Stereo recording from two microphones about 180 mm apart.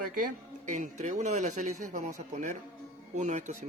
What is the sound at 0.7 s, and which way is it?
Speech, 45° right (ahead or behind).